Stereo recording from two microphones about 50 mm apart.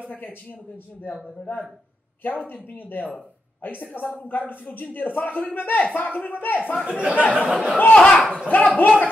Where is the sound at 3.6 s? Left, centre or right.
Left.